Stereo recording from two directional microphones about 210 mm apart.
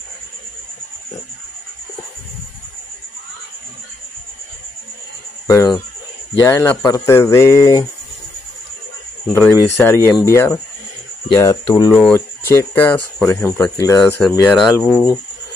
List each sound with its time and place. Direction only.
5.5 s cricket: 15° left (ahead or behind)
6.4 s speech: 10° left (ahead or behind)
9.3 s speech: 10° left (ahead or behind)
14.5 s speech: centre (ahead or behind)